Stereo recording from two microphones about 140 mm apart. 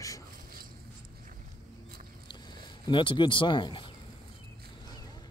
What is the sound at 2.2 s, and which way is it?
Speech, 30° left (ahead or behind).